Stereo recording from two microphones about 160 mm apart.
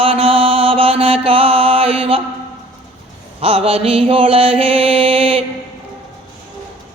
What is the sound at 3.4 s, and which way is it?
Mantra, 35° right (ahead or behind).